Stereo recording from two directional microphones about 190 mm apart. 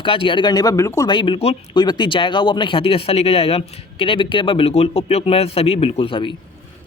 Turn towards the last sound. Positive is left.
turn(degrees=25)  # may be behind; listen again after turning